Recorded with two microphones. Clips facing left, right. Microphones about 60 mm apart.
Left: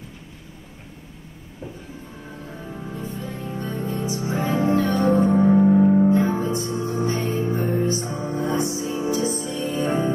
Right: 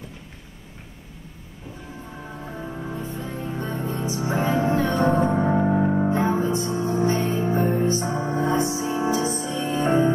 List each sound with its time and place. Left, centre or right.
2.6 s music: right